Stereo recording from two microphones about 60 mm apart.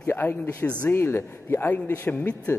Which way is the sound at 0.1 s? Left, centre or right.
Left.